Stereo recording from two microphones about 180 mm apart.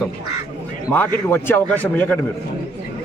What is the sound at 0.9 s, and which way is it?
A man's voice, 10° left (ahead or behind).